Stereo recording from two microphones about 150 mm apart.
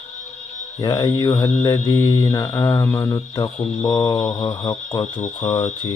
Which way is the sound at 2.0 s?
35° left (ahead or behind).